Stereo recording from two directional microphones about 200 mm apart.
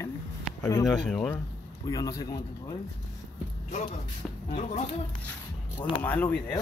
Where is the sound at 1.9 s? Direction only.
15° left (ahead or behind).